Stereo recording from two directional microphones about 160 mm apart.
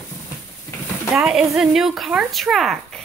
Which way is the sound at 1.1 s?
Centre (ahead or behind).